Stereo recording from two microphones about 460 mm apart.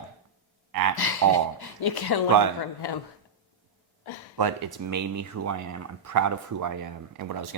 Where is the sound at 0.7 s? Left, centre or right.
Right.